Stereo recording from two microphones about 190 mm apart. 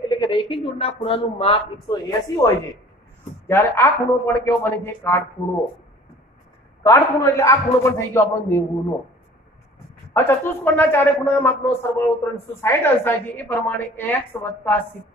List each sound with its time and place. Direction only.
0.1 s a man's voice: 25° left (ahead or behind)
6.8 s a man's voice: 15° left (ahead or behind)
10.1 s a man's voice: 10° left (ahead or behind)